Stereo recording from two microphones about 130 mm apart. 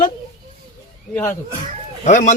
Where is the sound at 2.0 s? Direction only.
70° left (ahead or behind).